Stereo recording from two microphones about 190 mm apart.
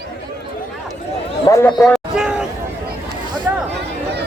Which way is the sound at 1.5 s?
15° left (ahead or behind).